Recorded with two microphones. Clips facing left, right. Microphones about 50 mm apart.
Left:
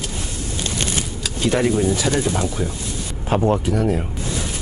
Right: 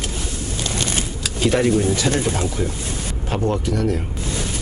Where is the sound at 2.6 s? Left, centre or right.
Centre.